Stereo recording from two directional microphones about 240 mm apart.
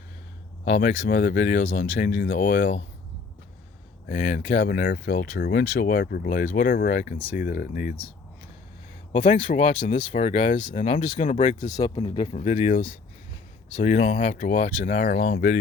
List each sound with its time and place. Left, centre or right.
0.6 s speech: left
4.1 s speech: left
9.1 s speech: left